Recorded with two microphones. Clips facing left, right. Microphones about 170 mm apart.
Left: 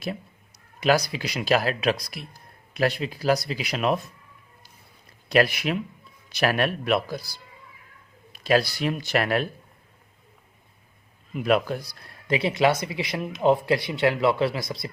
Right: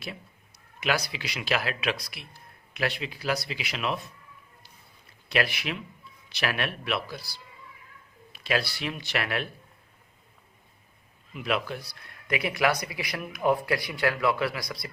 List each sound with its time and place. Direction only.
0.8 s speech: 40° left (ahead or behind)
5.3 s a man's voice: 45° left (ahead or behind)
11.3 s speech: 45° left (ahead or behind); by 14.8 s 25° left (ahead or behind)